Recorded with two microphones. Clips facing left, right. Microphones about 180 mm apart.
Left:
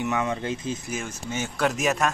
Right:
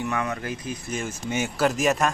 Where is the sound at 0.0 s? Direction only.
20° left (ahead or behind).